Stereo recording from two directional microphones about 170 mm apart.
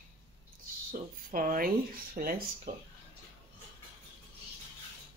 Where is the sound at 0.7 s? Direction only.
55° right (ahead or behind).